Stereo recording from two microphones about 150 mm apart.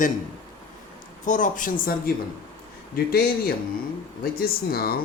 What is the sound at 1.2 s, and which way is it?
Speech, 55° left (ahead or behind).